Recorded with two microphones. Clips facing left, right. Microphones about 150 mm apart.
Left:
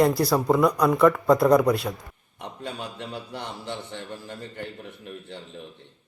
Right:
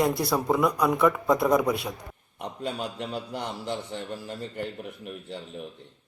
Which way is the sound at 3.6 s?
35° right (ahead or behind).